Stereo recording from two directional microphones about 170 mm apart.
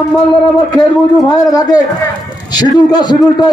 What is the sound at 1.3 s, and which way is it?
A man's voice, 20° left (ahead or behind).